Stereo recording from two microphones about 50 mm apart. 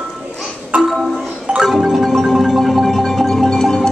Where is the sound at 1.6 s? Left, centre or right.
Centre.